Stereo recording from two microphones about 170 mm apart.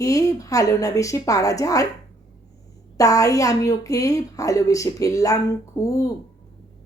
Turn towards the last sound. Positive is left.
turn(degrees=20)  # may be behind; listen again after turning